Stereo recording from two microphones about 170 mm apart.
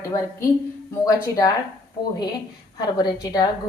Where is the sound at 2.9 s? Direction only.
25° left (ahead or behind).